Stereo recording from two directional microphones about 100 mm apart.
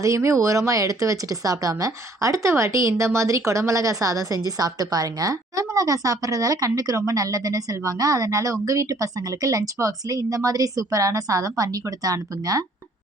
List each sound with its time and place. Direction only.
0.0 s speech: 30° right (ahead or behind)